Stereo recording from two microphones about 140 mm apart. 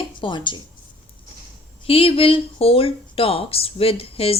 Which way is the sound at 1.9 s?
40° left (ahead or behind).